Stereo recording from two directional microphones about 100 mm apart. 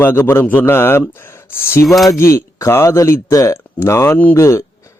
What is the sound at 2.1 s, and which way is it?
A man's voice, 30° left (ahead or behind).